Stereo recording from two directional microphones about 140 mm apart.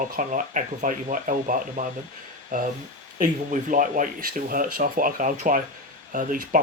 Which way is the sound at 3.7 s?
70° right (ahead or behind).